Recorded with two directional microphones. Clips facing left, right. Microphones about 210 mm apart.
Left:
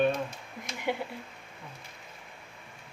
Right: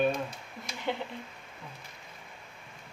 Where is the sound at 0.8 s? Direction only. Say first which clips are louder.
Left 2 dB; 10° left (ahead or behind).